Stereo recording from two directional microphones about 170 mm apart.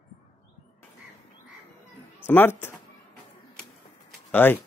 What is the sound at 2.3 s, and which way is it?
Speech, 10° left (ahead or behind).